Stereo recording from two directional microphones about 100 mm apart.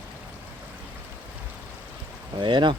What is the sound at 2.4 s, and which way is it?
Speech, 50° right (ahead or behind).